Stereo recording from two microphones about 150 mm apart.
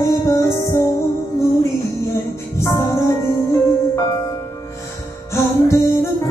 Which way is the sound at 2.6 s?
20° left (ahead or behind).